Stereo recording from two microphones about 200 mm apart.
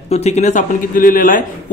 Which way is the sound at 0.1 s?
35° left (ahead or behind).